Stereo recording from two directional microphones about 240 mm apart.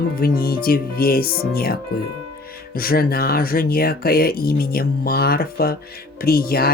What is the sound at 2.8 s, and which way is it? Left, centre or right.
Speech, left.